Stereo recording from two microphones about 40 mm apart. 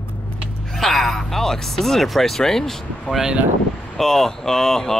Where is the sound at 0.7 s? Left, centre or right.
Centre.